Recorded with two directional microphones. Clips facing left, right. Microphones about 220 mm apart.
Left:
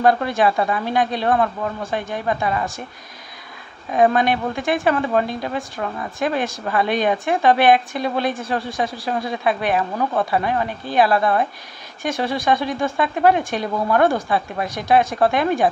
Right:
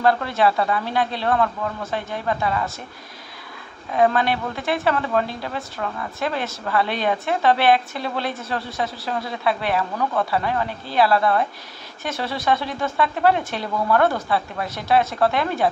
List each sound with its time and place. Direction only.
0.0 s speech: 15° left (ahead or behind)
3.9 s speech: 15° left (ahead or behind)